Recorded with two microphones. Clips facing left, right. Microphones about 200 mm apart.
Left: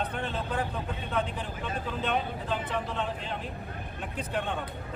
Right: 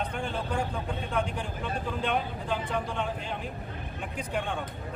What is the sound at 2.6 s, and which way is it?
Speech, 5° left (ahead or behind).